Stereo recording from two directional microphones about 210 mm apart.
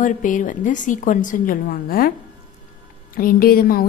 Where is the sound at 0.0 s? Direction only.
40° left (ahead or behind).